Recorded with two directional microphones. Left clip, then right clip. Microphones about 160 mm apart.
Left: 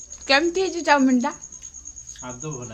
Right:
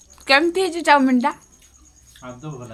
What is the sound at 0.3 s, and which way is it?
A woman's voice, 10° right (ahead or behind).